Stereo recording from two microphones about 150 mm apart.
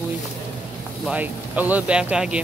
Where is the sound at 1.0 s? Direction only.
10° right (ahead or behind).